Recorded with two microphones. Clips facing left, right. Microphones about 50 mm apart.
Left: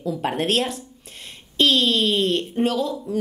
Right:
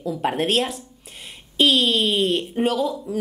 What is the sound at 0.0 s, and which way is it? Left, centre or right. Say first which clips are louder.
A woman's voice: right 1 dB; centre.